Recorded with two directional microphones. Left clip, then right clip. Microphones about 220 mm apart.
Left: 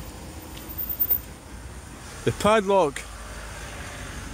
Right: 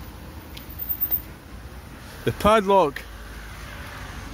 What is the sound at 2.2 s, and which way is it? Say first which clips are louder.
Speech: right 2 dB; 5° right (ahead or behind).